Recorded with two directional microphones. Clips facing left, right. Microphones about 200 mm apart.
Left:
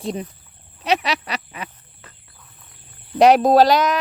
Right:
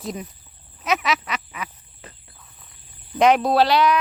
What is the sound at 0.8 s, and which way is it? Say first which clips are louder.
Frog: left 2 dB; 35° left (ahead or behind).